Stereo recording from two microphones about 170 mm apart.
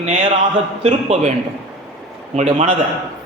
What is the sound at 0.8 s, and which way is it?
Speech, 35° right (ahead or behind).